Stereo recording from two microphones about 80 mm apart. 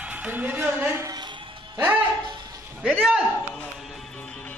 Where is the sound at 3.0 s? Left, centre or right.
Centre.